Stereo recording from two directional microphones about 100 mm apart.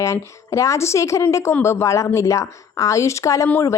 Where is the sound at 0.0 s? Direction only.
30° left (ahead or behind).